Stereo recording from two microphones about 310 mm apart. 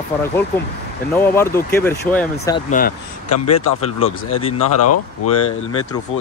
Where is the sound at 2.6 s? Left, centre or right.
Left.